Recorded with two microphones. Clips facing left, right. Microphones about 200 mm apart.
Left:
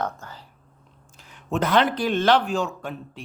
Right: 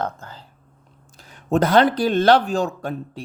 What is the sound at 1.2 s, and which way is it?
Speech, 40° right (ahead or behind).